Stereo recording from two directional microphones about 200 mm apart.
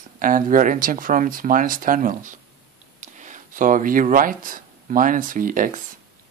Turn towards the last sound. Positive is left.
turn(degrees=-40)  # may be behind; listen again after turning